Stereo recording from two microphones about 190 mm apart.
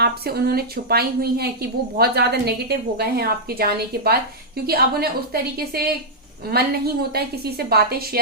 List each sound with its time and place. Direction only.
0.0 s a woman's voice: 55° right (ahead or behind)